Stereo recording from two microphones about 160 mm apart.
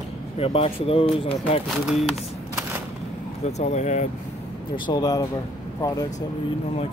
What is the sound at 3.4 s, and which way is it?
Speech, 45° left (ahead or behind).